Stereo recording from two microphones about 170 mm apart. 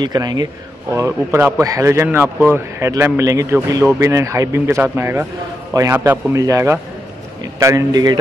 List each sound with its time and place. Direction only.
0.0 s a man's voice: 25° right (ahead or behind)